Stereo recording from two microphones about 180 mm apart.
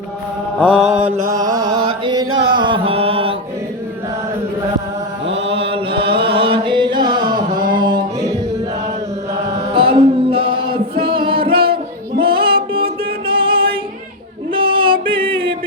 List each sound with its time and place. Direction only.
0.6 s mantra: 10° left (ahead or behind)
1.4 s a sound: 20° right (ahead or behind)
2.5 s mantra: 25° right (ahead or behind)
5.2 s chant: 35° right (ahead or behind)
7.7 s a sound: 25° right (ahead or behind)
9.6 s music: 30° right (ahead or behind)
11.0 s singing: 30° right (ahead or behind)
11.6 s music: 55° right (ahead or behind)
12.2 s music: 30° right (ahead or behind)
14.5 s a sound: 30° right (ahead or behind)
15.1 s music: 30° right (ahead or behind)